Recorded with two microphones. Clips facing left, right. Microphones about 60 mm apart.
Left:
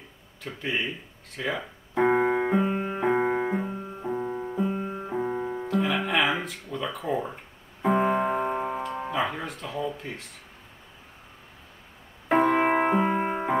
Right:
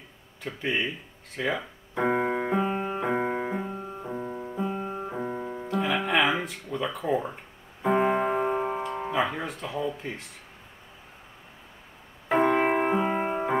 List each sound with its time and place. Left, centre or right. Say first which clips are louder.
0.4 s speech: right 1 dB; centre
2.0 s keyboard: left 3 dB; left
2.5 s music: left 1 dB; centre
3.2 s piano: left 3 dB; centre
3.5 s music: left 2 dB; centre
4.1 s music: left 5 dB; centre
4.6 s music: even; centre
5.2 s piano: left 3 dB; centre
5.7 s music: right 1 dB; centre
12.3 s music: left 1 dB; centre